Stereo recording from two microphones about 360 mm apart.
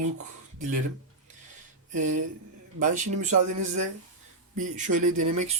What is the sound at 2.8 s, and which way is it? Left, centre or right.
Speech, right.